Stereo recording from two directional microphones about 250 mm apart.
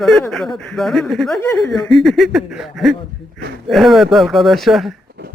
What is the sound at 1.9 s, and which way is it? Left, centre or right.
A man's voice, centre.